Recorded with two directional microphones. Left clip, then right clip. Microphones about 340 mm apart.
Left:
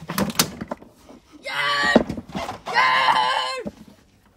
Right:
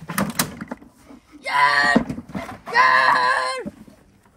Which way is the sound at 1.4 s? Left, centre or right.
Centre.